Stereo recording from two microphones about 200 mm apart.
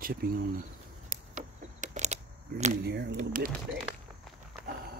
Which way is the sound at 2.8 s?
55° right (ahead or behind).